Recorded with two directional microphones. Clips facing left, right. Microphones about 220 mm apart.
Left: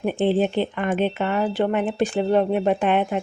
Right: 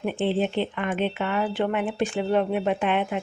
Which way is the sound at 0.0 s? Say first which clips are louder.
Left 4 dB; 40° left (ahead or behind).